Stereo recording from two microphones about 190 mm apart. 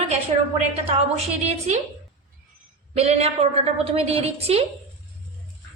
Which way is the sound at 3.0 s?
35° right (ahead or behind).